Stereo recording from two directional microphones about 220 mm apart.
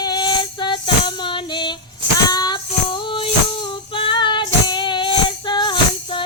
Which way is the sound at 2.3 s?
20° left (ahead or behind).